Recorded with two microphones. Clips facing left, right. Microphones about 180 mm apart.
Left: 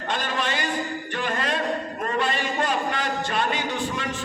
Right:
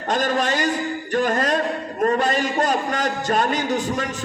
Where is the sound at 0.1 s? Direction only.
40° right (ahead or behind).